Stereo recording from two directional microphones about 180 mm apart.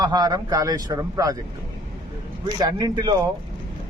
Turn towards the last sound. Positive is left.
turn(degrees=-20)  # may be behind; listen again after turning